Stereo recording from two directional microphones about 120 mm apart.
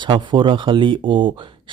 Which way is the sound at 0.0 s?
40° right (ahead or behind).